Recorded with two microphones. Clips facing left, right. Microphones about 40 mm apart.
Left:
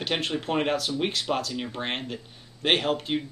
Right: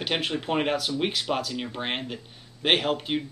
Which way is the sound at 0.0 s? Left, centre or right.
Centre.